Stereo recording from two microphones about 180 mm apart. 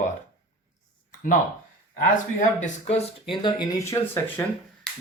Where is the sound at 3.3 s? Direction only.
25° left (ahead or behind).